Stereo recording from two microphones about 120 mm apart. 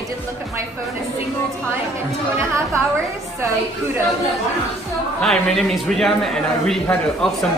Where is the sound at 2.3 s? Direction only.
20° right (ahead or behind).